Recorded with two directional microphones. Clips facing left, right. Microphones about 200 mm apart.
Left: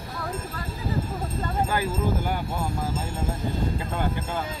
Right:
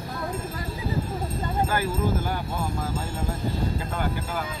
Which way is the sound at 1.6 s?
15° left (ahead or behind).